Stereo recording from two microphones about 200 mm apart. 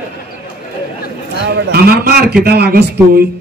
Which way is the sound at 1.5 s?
50° right (ahead or behind).